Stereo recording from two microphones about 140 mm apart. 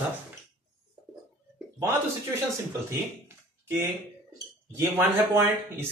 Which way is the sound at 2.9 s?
20° right (ahead or behind).